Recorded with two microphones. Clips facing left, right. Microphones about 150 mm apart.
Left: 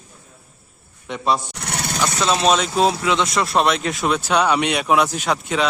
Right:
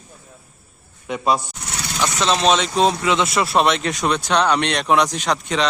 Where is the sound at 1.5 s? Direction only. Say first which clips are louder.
Left 4 dB; 65° left (ahead or behind).